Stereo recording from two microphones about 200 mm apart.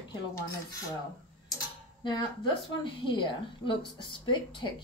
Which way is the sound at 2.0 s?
20° left (ahead or behind).